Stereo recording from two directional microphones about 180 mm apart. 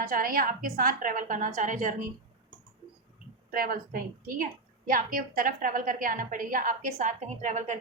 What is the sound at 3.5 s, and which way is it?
A woman's voice, 55° right (ahead or behind).